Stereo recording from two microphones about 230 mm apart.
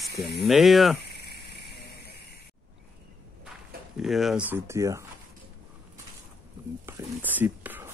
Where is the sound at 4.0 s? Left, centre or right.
Centre.